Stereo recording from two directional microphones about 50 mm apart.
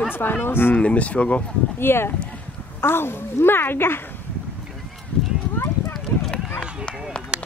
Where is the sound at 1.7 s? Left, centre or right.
Left.